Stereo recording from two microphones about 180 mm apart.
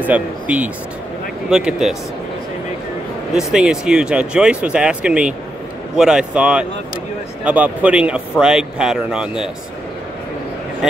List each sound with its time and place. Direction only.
0.0 s speech: 10° right (ahead or behind)
3.3 s speech: 5° right (ahead or behind)